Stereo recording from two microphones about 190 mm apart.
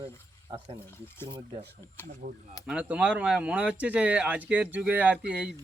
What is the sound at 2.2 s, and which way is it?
Speech, 45° right (ahead or behind).